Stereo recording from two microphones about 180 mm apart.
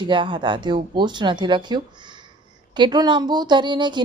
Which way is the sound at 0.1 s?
25° right (ahead or behind).